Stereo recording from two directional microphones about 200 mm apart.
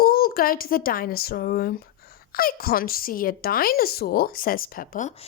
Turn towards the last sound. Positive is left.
turn(degrees=40)  # may be behind; listen again after turning